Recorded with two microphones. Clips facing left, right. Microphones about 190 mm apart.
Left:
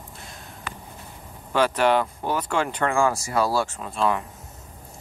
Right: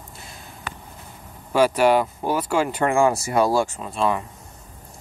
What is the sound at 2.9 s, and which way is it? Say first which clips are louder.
Speech: right 4 dB; 20° right (ahead or behind).